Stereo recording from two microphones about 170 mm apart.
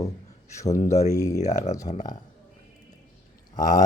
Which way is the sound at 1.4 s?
40° left (ahead or behind).